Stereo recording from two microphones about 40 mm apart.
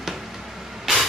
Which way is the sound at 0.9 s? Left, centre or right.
Centre.